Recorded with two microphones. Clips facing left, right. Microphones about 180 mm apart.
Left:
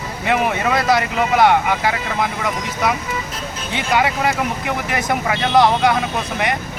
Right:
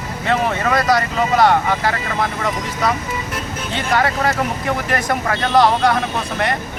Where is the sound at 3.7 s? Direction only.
15° left (ahead or behind).